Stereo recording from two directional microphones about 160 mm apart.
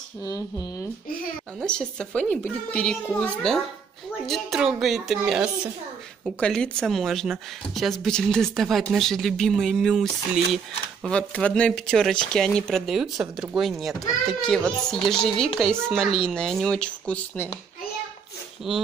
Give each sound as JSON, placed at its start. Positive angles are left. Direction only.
{"t": 0.2, "sound": "speech", "side_deg": 20}
{"t": 1.6, "sound": "speech", "side_deg": 5}
{"t": 4.3, "sound": "speech", "side_deg": 0}
{"t": 18.7, "sound": "speech", "side_deg": 0}